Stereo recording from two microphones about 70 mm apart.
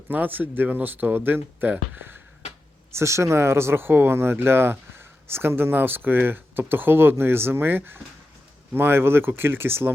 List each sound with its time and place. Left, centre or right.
0.1 s speech: right
2.9 s speech: right